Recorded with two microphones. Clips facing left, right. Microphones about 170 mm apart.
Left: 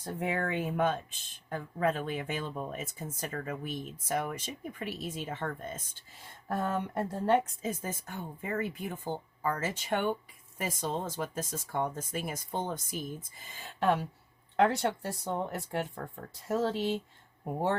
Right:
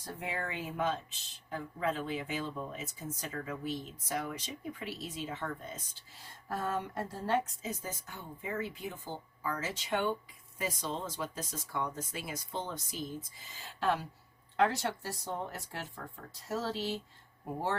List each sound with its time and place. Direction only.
0.0 s speech: 55° left (ahead or behind)